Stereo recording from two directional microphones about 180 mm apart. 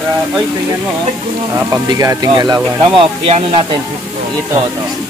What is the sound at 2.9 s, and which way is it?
Speech, 30° right (ahead or behind).